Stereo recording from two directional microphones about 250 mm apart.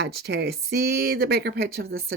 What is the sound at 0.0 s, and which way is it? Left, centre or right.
Speech, right.